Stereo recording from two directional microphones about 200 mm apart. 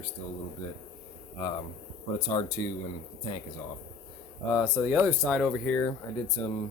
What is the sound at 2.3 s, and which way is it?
Speech, 25° left (ahead or behind).